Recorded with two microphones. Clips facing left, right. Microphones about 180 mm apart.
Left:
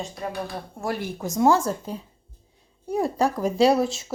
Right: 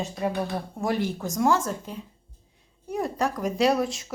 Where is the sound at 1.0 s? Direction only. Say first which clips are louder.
Left 7 dB; 20° left (ahead or behind).